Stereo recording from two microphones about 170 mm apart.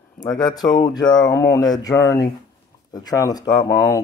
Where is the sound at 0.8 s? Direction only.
25° left (ahead or behind).